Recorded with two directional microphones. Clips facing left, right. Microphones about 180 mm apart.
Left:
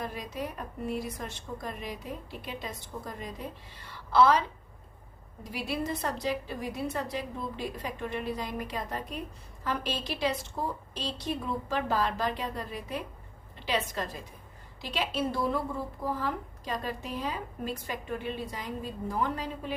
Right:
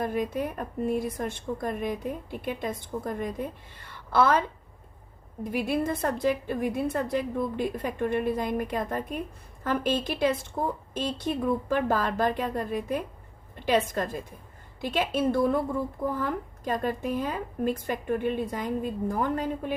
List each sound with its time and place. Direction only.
0.0 s a woman's voice: 50° right (ahead or behind)